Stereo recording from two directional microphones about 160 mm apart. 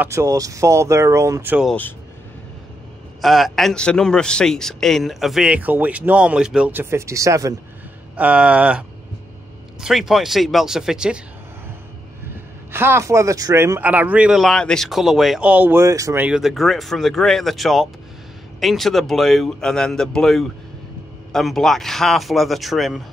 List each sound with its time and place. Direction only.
0.0 s speech: 20° right (ahead or behind)
1.7 s speech: 10° left (ahead or behind)
3.2 s a man's voice: centre (ahead or behind); by 7.5 s 20° right (ahead or behind)
8.2 s a man's voice: 10° right (ahead or behind)
12.7 s speech: 15° right (ahead or behind)
16.3 s a man's voice: 5° right (ahead or behind)